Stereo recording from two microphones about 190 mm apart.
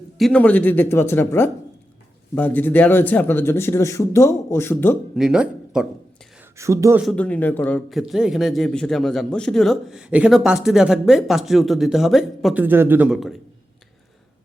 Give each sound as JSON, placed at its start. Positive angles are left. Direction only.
{"t": 0.2, "sound": "speech", "side_deg": 5}
{"t": 5.1, "sound": "speech", "side_deg": -5}
{"t": 6.6, "sound": "a man's voice", "side_deg": -15}
{"t": 7.0, "sound": "a man's voice", "side_deg": 5}
{"t": 12.6, "sound": "a man's voice", "side_deg": -10}